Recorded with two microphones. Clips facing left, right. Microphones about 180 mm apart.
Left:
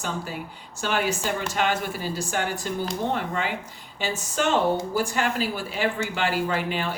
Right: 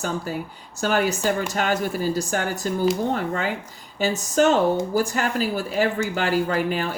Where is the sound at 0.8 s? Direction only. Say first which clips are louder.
Right 4 dB; 45° right (ahead or behind).